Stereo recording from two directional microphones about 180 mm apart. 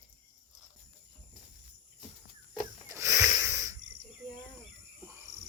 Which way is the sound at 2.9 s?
15° right (ahead or behind).